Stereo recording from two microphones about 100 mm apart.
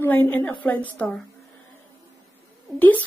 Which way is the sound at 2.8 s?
15° left (ahead or behind).